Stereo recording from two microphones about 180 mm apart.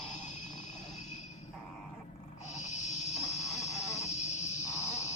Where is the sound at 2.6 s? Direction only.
40° left (ahead or behind).